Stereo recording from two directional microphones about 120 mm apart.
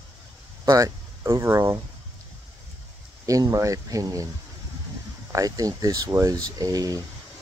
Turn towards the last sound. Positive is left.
turn(degrees=-30)  # may be behind; listen again after turning